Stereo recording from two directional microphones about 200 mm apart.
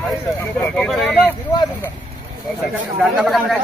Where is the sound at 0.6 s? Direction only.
Centre (ahead or behind).